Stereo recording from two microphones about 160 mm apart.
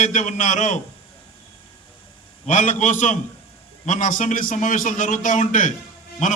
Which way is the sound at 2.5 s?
50° left (ahead or behind).